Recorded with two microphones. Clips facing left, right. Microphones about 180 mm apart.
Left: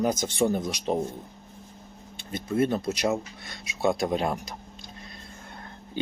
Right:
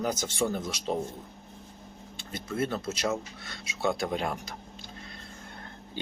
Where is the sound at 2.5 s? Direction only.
15° left (ahead or behind).